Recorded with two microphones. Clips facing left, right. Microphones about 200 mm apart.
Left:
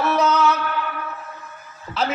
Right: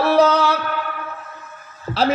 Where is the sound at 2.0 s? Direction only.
35° right (ahead or behind).